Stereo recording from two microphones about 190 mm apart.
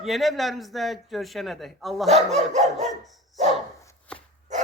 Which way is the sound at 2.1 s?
35° right (ahead or behind).